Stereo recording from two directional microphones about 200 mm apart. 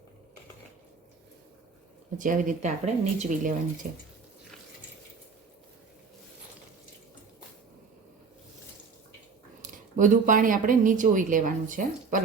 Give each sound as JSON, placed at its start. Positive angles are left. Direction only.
{"t": 2.1, "sound": "speech", "side_deg": -40}
{"t": 9.6, "sound": "speech", "side_deg": -40}